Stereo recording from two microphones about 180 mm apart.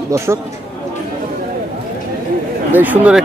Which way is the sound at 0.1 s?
15° right (ahead or behind).